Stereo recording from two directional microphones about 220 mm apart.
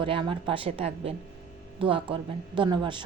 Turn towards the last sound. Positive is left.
turn(degrees=-20)  # may be behind; listen again after turning